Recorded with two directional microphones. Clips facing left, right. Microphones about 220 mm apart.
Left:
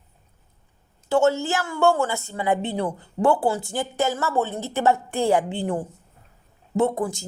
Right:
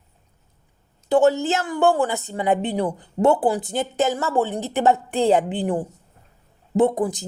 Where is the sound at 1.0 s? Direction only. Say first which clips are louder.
Right 3 dB; 15° right (ahead or behind).